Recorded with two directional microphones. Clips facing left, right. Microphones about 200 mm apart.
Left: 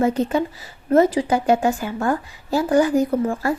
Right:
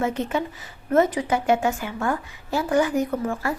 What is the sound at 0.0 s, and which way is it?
A woman's voice, 35° left (ahead or behind).